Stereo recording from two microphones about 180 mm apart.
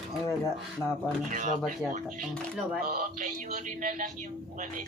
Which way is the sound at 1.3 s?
45° right (ahead or behind).